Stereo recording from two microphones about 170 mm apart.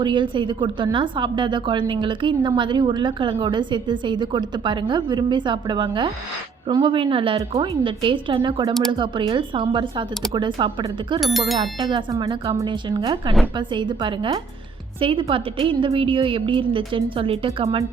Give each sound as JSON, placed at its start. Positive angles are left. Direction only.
{"t": 0.0, "sound": "a woman's voice", "side_deg": -30}
{"t": 11.2, "sound": "speech", "side_deg": 0}
{"t": 11.8, "sound": "a woman's voice", "side_deg": -30}